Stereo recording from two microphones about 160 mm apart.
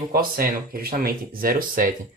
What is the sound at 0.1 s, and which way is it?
Speech, 65° right (ahead or behind).